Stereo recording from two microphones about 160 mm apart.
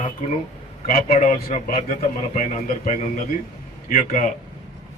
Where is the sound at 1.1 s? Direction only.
40° left (ahead or behind).